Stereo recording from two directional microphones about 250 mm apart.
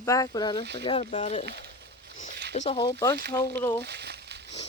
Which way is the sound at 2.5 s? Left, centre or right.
Left.